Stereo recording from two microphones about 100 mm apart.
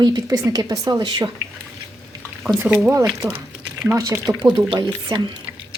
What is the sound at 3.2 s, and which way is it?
Speech, 35° right (ahead or behind).